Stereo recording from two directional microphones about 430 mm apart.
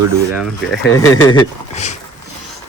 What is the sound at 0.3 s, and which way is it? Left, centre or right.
Speech, centre.